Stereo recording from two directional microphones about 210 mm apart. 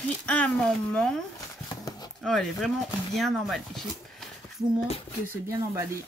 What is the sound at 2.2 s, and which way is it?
Speech, centre (ahead or behind).